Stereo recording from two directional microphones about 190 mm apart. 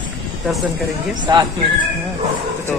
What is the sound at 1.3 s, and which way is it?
Speech, 20° right (ahead or behind).